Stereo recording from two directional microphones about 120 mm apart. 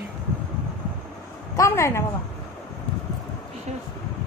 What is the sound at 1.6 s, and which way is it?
Speech, 25° left (ahead or behind).